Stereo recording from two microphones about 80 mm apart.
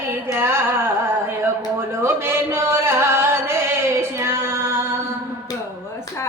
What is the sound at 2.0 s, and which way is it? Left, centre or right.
Chant, right.